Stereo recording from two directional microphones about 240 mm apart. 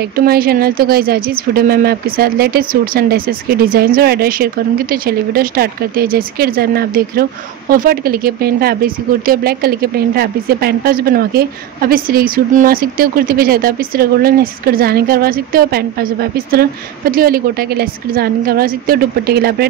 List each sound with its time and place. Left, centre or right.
0.1 s speech: right